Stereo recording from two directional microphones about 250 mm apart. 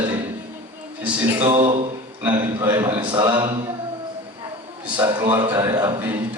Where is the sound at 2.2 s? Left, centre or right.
Centre.